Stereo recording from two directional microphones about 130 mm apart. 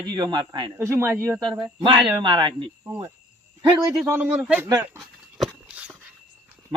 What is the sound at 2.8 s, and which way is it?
Speech, 20° right (ahead or behind).